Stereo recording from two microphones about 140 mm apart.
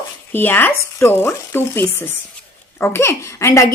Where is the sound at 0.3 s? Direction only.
15° left (ahead or behind).